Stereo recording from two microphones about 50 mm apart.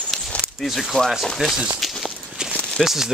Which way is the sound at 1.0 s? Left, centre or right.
Centre.